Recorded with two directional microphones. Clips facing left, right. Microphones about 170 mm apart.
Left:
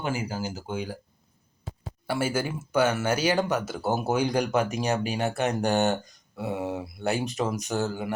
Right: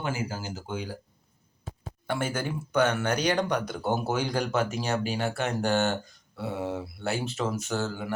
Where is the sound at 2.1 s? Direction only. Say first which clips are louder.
Left 2 dB; 5° left (ahead or behind).